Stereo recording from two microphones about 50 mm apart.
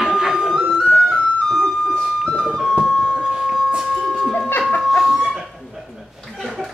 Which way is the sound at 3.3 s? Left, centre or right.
Centre.